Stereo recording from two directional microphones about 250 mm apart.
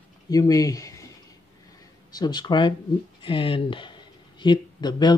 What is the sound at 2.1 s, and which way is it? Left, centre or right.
Speech, centre.